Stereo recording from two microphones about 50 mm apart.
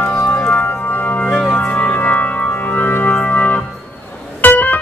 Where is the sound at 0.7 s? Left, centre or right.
Left.